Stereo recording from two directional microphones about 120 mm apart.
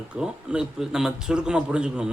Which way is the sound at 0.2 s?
5° right (ahead or behind).